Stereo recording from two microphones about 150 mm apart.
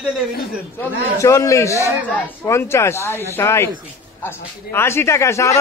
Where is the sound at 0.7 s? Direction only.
20° left (ahead or behind).